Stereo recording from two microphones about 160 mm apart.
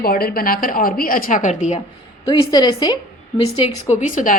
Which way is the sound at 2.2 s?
25° left (ahead or behind).